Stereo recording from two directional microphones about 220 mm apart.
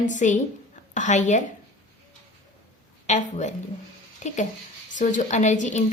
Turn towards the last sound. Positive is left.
turn(degrees=35)  # may be behind; listen again after turning